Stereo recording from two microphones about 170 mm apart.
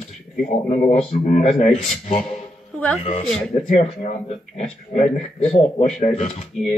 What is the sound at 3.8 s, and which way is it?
A man's voice, 40° left (ahead or behind).